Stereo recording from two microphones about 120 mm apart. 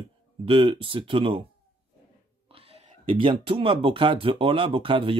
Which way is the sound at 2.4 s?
55° right (ahead or behind).